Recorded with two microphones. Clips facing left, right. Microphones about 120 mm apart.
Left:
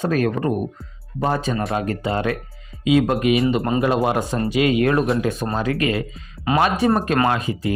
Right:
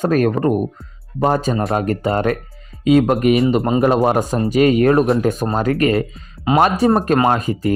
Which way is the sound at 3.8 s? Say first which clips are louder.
Right 4 dB; 40° right (ahead or behind).